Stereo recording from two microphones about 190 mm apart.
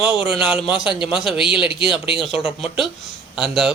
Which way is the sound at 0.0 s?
5° right (ahead or behind).